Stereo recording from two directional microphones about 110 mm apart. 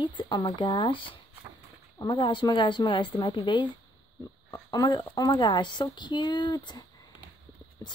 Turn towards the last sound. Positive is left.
turn(degrees=40)  # may be behind; listen again after turning